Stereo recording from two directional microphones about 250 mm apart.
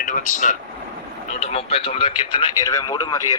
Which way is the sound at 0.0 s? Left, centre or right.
Left.